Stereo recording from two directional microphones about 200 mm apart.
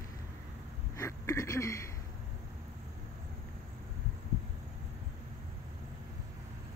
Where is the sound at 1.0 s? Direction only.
15° left (ahead or behind).